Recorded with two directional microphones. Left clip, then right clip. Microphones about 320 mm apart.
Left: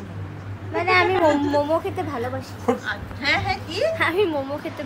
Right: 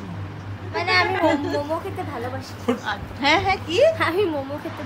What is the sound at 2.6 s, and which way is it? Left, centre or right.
A woman's voice, centre.